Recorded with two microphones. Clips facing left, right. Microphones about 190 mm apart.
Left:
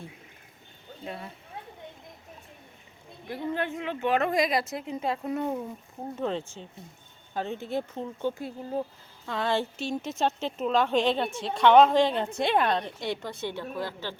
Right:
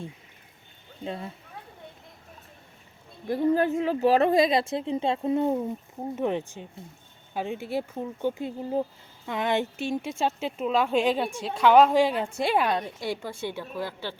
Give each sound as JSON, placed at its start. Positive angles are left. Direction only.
{"t": 1.0, "sound": "speech", "side_deg": -25}
{"t": 3.2, "sound": "a woman's voice", "side_deg": -40}